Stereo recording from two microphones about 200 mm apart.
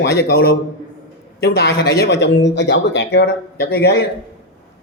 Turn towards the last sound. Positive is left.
turn(degrees=55)  # may be behind; listen again after turning